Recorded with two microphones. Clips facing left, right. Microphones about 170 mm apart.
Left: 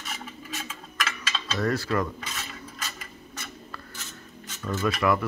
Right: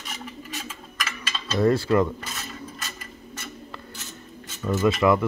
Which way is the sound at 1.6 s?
25° right (ahead or behind).